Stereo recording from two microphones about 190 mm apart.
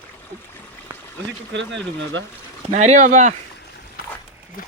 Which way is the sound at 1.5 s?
75° right (ahead or behind).